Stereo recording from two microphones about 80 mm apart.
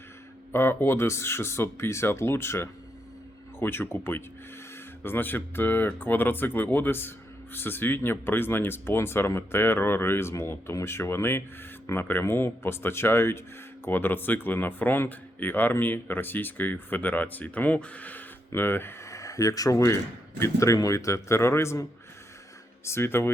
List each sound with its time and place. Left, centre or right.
0.5 s speech: left